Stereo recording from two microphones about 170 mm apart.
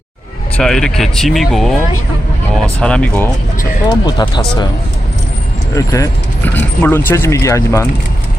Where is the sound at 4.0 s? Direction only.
20° left (ahead or behind).